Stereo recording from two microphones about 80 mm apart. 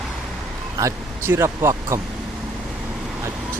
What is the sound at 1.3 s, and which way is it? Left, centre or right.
Speech, right.